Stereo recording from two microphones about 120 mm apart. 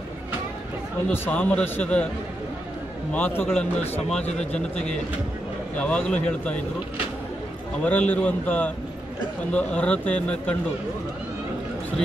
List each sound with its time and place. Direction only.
1.0 s a man's voice: 15° left (ahead or behind)
3.1 s a man's voice: 15° left (ahead or behind)
4.2 s speech: 65° left (ahead or behind)
5.8 s a man's voice: 10° left (ahead or behind)
7.8 s a man's voice: 15° left (ahead or behind)